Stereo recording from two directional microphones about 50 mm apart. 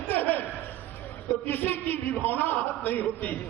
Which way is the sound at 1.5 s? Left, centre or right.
Left.